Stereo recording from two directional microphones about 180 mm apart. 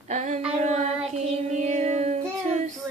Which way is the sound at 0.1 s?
40° right (ahead or behind).